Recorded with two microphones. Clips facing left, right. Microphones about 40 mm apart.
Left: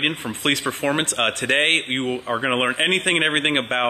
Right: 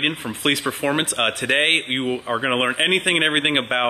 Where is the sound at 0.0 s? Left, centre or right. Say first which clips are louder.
Right 1 dB; centre.